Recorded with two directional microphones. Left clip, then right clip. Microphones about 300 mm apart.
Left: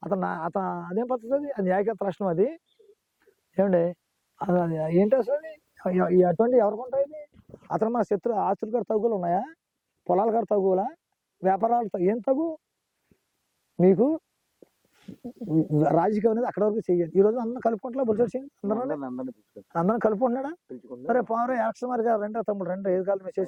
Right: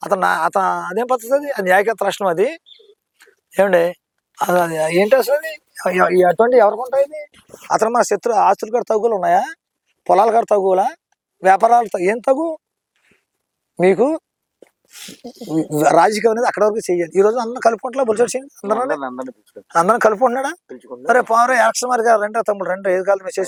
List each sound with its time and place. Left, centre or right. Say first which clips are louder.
0.0 s a man's voice: right 13 dB; centre
8.0 s a man's voice: right 11 dB; centre
12.4 s speech: right 8 dB; right
13.7 s a sound: right 7 dB; centre
15.4 s a man's voice: right 6 dB; centre